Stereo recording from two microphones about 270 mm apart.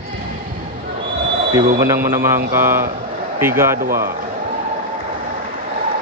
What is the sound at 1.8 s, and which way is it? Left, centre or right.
Speech, centre.